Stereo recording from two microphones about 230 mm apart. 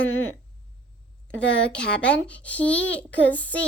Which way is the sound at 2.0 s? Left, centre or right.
Centre.